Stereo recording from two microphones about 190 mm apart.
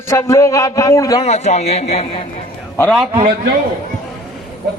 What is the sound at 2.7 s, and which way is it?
Speech, 5° left (ahead or behind).